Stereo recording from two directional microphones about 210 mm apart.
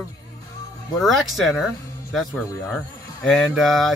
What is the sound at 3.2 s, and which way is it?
Speech, centre (ahead or behind).